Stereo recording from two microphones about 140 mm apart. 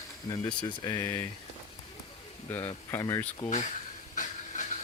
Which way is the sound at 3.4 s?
60° left (ahead or behind).